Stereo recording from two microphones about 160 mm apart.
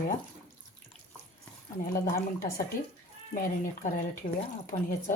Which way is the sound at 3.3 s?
60° left (ahead or behind).